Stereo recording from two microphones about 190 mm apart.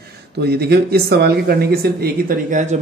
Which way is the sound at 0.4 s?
55° right (ahead or behind).